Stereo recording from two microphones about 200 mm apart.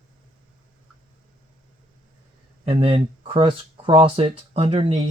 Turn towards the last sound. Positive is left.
turn(degrees=-30)  # may be behind; listen again after turning